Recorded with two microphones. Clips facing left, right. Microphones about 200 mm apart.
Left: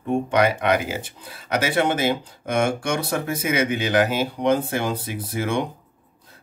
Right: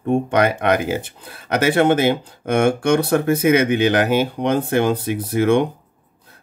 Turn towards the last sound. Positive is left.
turn(degrees=-60)  # may be behind; listen again after turning